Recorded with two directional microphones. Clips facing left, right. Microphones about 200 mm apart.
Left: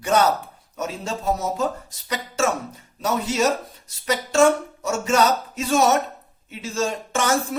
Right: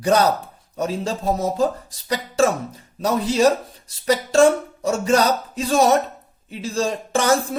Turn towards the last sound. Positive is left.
turn(degrees=-35)  # may be behind; listen again after turning